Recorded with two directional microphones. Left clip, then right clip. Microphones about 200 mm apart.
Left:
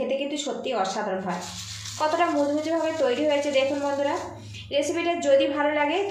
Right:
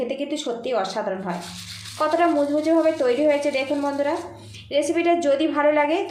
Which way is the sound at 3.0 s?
35° right (ahead or behind).